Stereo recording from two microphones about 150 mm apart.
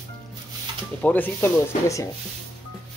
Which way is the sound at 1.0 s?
10° left (ahead or behind).